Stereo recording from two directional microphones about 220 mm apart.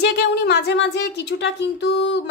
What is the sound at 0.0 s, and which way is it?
A woman's voice, 50° left (ahead or behind).